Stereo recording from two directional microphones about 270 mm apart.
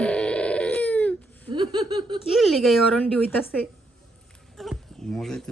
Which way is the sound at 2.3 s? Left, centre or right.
Centre.